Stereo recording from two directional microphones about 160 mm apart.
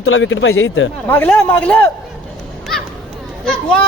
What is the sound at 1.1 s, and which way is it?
Speech, 10° left (ahead or behind).